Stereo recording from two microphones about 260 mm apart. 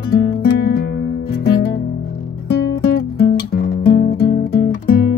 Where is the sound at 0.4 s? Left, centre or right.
Left.